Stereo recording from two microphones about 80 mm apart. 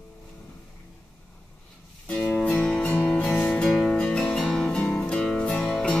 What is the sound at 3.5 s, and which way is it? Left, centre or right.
Music, centre.